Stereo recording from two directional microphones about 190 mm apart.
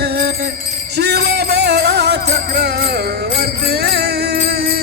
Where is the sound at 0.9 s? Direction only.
60° right (ahead or behind).